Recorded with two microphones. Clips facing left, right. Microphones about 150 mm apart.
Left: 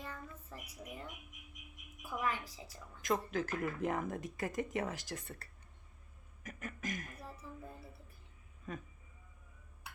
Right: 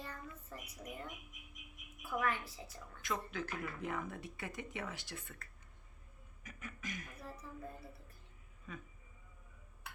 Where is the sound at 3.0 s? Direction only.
40° left (ahead or behind).